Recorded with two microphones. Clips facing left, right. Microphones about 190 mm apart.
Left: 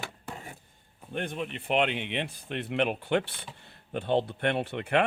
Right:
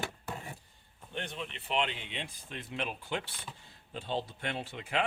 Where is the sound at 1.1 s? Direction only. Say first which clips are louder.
Left 7 dB; 50° left (ahead or behind).